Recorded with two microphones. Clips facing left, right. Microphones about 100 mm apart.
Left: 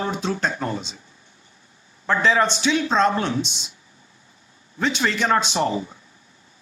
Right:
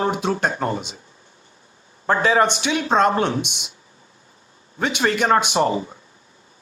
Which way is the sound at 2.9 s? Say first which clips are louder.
Right 3 dB; 55° right (ahead or behind).